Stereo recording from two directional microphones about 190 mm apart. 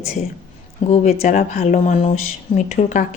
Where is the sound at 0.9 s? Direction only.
35° left (ahead or behind).